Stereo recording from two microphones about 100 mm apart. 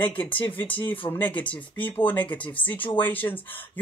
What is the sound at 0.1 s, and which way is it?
Speech, 15° left (ahead or behind).